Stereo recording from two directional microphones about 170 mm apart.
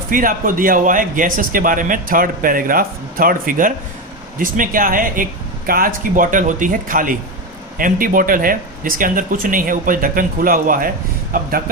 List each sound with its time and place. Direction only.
0.1 s speech: 55° right (ahead or behind)